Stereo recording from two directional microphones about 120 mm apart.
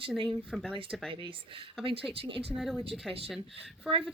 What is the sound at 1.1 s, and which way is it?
Speech, 45° right (ahead or behind).